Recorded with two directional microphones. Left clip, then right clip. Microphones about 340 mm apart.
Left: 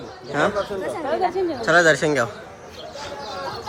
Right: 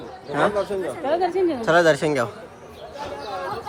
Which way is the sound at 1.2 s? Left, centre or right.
Right.